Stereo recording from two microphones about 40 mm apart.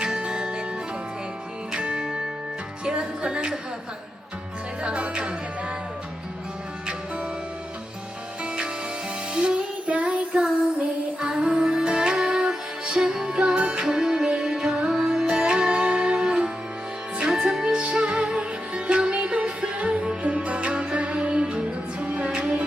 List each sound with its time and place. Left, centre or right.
0.0 s music: right
1.7 s music: right
2.8 s speech: right
4.8 s music: right
9.3 s music: right
11.2 s music: right
13.8 s music: centre
17.5 s music: centre